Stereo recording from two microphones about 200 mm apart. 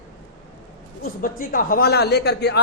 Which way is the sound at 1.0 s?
45° left (ahead or behind).